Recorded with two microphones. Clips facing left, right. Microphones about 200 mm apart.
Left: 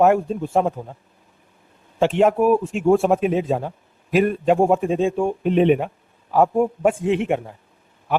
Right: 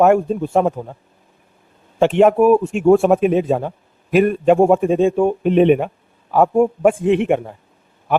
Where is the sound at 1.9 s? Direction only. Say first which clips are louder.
Right 4 dB; 60° right (ahead or behind).